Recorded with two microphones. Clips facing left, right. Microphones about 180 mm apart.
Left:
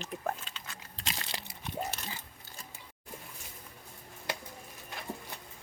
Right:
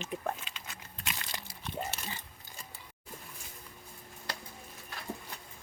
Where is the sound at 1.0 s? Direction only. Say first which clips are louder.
Left 1 dB; 30° left (ahead or behind).